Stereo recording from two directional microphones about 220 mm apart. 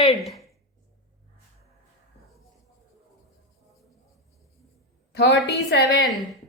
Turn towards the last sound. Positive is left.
turn(degrees=45)  # may be behind; listen again after turning